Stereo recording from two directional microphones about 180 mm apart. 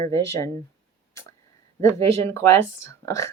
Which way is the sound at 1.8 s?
15° left (ahead or behind).